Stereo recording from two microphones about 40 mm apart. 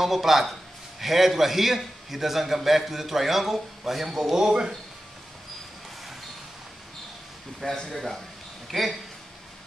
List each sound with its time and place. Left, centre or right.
0.0 s a man's voice: centre
7.9 s speech: centre